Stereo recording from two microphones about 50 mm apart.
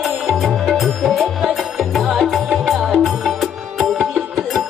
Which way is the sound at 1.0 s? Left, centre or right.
Centre.